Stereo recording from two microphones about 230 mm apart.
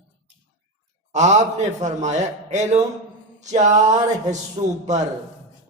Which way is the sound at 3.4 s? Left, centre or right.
Right.